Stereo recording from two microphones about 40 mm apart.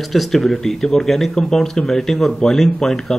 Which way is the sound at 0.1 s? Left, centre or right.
Centre.